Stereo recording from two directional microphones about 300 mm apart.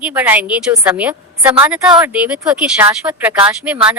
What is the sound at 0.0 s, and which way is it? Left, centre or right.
Speech, centre.